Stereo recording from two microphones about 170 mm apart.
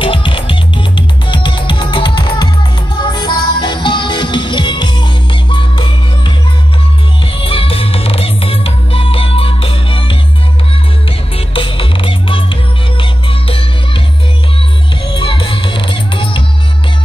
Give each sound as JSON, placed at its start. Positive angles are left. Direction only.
{"t": 0.0, "sound": "music", "side_deg": 30}
{"t": 7.4, "sound": "music", "side_deg": 35}
{"t": 15.1, "sound": "music", "side_deg": 30}